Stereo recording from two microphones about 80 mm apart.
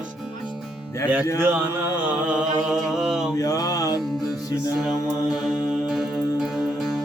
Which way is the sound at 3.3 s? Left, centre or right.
Left.